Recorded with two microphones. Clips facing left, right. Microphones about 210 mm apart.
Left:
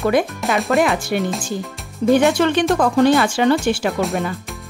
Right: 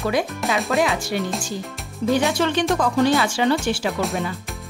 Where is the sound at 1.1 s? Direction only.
55° left (ahead or behind).